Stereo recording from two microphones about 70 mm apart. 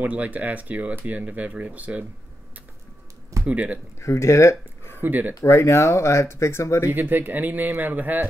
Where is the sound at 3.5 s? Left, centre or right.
Centre.